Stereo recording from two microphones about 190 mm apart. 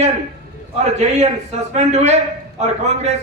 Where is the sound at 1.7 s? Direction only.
35° right (ahead or behind).